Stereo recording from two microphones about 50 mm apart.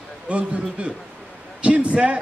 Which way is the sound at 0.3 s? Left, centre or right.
Right.